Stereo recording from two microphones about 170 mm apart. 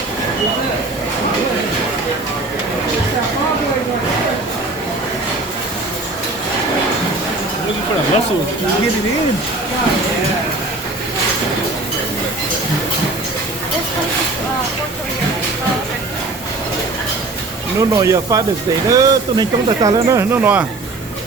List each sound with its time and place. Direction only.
17.7 s speech: 20° right (ahead or behind)